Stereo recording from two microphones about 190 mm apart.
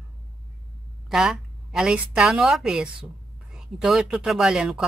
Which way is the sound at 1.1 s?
Centre (ahead or behind).